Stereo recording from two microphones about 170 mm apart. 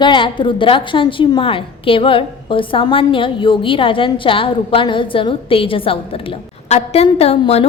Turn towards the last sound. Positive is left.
turn(degrees=35)  # may be behind; listen again after turning